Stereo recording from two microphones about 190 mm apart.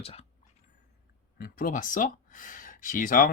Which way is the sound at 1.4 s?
45° left (ahead or behind).